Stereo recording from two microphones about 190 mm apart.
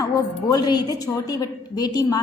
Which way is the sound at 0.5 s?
20° left (ahead or behind).